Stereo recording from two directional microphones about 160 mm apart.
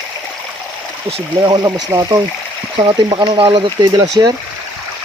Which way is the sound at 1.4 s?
25° right (ahead or behind).